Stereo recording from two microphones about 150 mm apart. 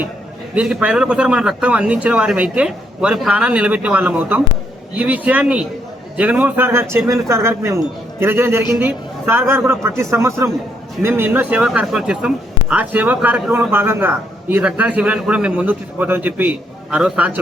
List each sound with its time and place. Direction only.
0.5 s speech: 10° right (ahead or behind)